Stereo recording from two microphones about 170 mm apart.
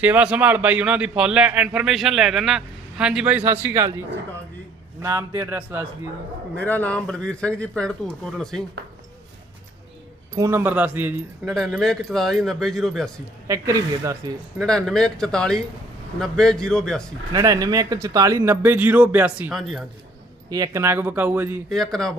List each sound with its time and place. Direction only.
0.0 s a man's voice: 10° right (ahead or behind)
5.0 s a man's voice: 15° right (ahead or behind)
6.6 s speech: 10° left (ahead or behind)
10.3 s a man's voice: 15° right (ahead or behind)
11.8 s speech: centre (ahead or behind)
13.5 s speech: 20° right (ahead or behind)
14.6 s speech: 5° left (ahead or behind)
17.3 s a man's voice: 20° right (ahead or behind); by 19.8 s centre (ahead or behind)
20.5 s a man's voice: 20° right (ahead or behind)
21.7 s speech: 5° left (ahead or behind)